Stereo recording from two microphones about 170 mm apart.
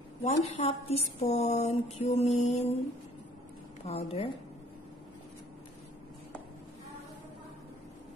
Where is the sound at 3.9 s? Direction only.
35° left (ahead or behind).